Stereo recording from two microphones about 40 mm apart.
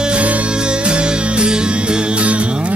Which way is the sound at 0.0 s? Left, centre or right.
Right.